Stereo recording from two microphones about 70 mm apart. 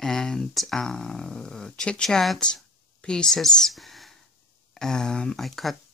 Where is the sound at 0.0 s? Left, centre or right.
Centre.